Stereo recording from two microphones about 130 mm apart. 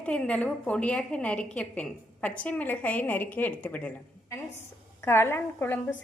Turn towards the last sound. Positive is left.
turn(degrees=15)  # may be behind; listen again after turning